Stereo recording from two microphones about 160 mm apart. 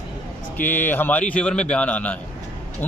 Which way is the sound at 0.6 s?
10° left (ahead or behind).